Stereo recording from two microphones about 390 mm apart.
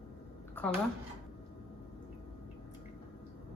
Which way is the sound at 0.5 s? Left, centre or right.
Centre.